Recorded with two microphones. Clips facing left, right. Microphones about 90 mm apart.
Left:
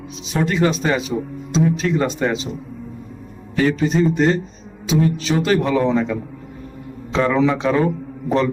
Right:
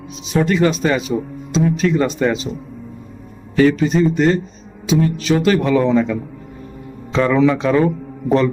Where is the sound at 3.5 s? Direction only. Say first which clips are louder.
Right 4 dB; 25° left (ahead or behind).